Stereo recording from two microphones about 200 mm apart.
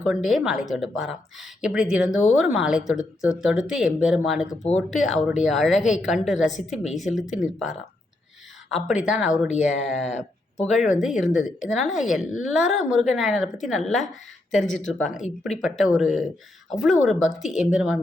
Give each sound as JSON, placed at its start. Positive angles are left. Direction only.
{"t": 0.0, "sound": "speech", "side_deg": 0}
{"t": 8.7, "sound": "speech", "side_deg": -5}
{"t": 9.5, "sound": "speech", "side_deg": 35}
{"t": 10.9, "sound": "speech", "side_deg": 0}
{"t": 14.6, "sound": "speech", "side_deg": 35}
{"t": 14.9, "sound": "speech", "side_deg": 0}